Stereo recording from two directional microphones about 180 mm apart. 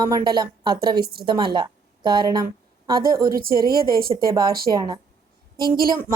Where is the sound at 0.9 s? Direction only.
60° right (ahead or behind).